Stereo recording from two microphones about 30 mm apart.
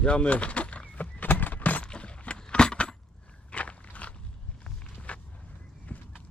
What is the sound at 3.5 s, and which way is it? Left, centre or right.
Biting, left.